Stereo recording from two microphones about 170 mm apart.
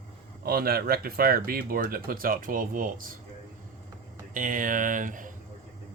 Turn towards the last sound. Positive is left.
turn(degrees=-50)  # may be behind; listen again after turning